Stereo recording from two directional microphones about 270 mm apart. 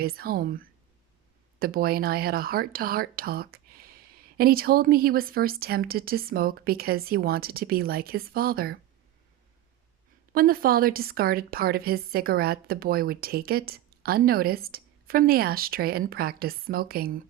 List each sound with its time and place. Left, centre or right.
0.0 s speech: right
10.3 s speech: right